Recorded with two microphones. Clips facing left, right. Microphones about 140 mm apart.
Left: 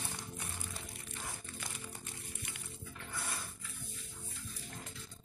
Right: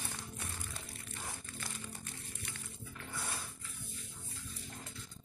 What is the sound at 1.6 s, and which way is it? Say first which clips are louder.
Music: right 2 dB; 20° left (ahead or behind).